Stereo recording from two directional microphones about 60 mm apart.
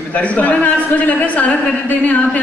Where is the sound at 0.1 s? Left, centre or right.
Left.